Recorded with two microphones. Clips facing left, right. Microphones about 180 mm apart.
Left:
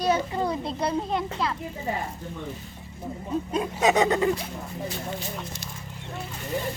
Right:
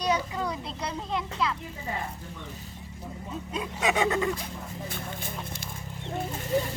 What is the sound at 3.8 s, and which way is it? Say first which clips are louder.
Speech: left 4 dB; 40° left (ahead or behind).